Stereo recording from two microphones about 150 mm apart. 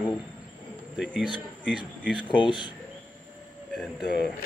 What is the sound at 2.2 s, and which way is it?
Speech, 35° left (ahead or behind).